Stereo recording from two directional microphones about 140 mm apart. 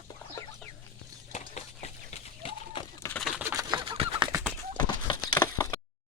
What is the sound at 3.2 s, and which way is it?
Bird, centre (ahead or behind).